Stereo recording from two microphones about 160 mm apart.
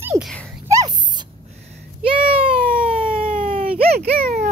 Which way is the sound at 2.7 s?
65° right (ahead or behind).